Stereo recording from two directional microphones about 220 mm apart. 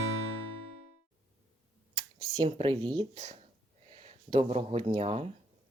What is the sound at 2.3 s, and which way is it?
Speech, 20° right (ahead or behind).